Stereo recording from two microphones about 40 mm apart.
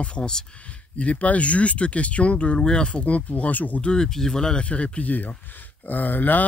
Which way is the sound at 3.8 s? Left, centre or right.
Centre.